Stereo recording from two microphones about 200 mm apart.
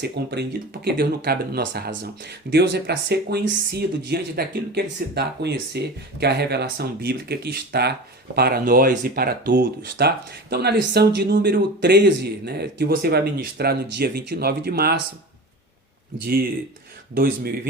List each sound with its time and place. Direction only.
0.0 s speech: 55° right (ahead or behind)